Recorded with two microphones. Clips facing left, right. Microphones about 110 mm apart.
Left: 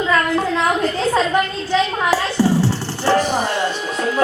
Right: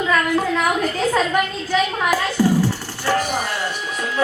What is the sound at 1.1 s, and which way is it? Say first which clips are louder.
Music: left 2 dB; 25° left (ahead or behind).